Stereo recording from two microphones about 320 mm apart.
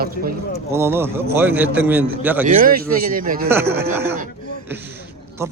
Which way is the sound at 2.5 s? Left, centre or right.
Right.